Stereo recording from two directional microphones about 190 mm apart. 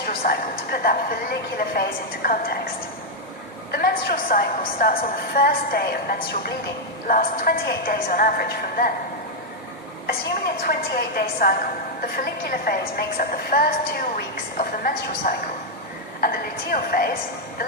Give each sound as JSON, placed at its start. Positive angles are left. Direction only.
{"t": 0.0, "sound": "a woman's voice", "side_deg": 50}
{"t": 3.7, "sound": "a woman's voice", "side_deg": 55}
{"t": 10.1, "sound": "a woman's voice", "side_deg": 55}
{"t": 13.0, "sound": "a woman's voice", "side_deg": 50}